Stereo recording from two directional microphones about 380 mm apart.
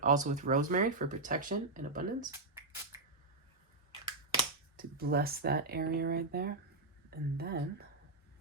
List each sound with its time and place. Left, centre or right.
0.0 s speech: centre
4.4 s speech: right